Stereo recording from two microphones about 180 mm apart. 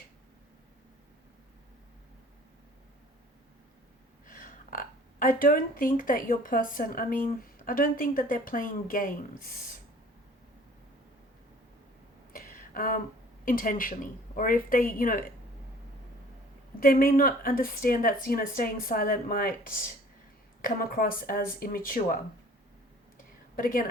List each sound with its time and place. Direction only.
4.3 s a sound: 50° left (ahead or behind)
6.0 s a woman's voice: 50° left (ahead or behind)
12.3 s a sound: 55° left (ahead or behind)
13.4 s a woman's voice: 50° left (ahead or behind)
16.8 s a woman's voice: 55° left (ahead or behind)
23.6 s a woman's voice: 50° left (ahead or behind)